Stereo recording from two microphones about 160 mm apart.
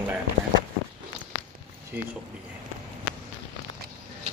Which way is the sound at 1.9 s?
10° right (ahead or behind).